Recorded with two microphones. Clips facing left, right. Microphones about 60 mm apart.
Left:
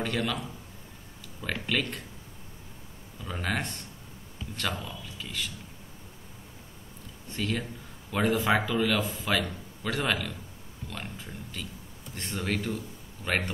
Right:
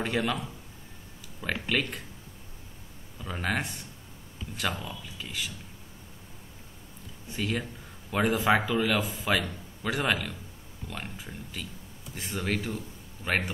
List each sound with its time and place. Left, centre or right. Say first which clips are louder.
0.0 s a man's voice: right 1 dB; centre
1.4 s speech: right 1 dB; centre
3.3 s speech: right 1 dB; centre
4.8 s a man's voice: even; centre
7.2 s a man's voice: even; centre